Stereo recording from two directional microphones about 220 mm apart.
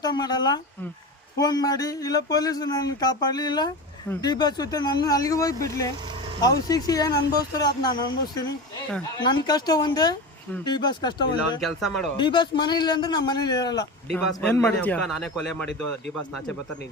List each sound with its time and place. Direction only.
0.0 s a man's voice: 20° left (ahead or behind); by 15.9 s centre (ahead or behind)